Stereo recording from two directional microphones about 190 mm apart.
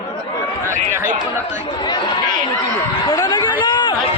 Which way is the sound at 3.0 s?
20° left (ahead or behind).